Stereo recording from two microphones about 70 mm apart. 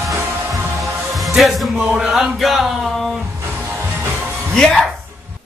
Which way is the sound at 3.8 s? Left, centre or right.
Right.